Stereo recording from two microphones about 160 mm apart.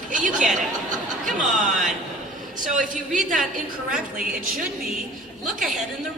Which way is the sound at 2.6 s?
55° right (ahead or behind).